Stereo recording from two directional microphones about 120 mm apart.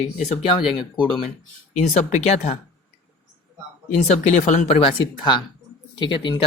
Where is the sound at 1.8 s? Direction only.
75° left (ahead or behind).